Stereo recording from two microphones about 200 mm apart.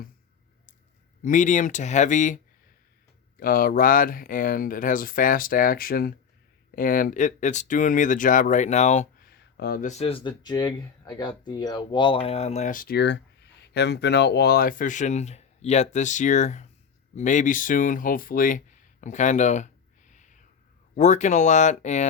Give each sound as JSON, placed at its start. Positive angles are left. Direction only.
{"t": 1.2, "sound": "speech", "side_deg": 40}
{"t": 9.3, "sound": "a sound", "side_deg": 55}
{"t": 9.8, "sound": "speech", "side_deg": 30}